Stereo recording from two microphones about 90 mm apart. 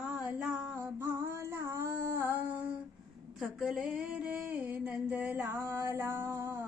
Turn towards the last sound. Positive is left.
turn(degrees=-30)  # may be behind; listen again after turning